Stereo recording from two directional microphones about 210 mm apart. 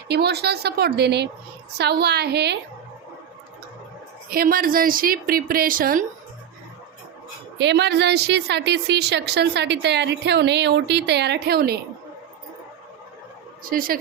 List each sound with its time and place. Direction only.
0.1 s a woman's voice: 50° right (ahead or behind)
4.3 s a woman's voice: 45° right (ahead or behind)
7.6 s a woman's voice: 55° right (ahead or behind)
13.7 s a woman's voice: 40° right (ahead or behind)